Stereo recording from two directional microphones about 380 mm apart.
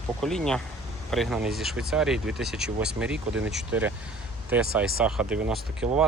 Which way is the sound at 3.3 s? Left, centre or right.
Right.